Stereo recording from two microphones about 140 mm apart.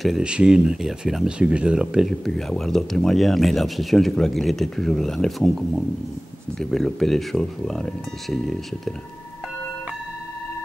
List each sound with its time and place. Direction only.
0.0 s speech: 5° right (ahead or behind)